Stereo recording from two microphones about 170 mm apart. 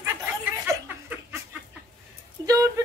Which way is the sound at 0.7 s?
15° right (ahead or behind).